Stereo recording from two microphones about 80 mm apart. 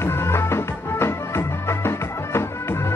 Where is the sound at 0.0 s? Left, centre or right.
Left.